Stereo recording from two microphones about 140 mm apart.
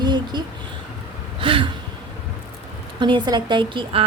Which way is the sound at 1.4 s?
40° right (ahead or behind).